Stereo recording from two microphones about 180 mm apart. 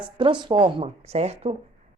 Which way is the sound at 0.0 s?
25° right (ahead or behind).